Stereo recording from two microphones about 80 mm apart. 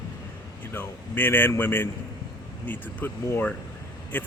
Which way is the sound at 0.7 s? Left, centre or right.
Left.